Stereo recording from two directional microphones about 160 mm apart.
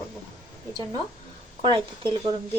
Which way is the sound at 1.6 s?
35° right (ahead or behind).